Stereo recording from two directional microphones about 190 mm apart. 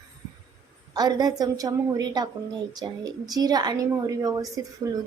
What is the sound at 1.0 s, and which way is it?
A woman's voice, 20° right (ahead or behind).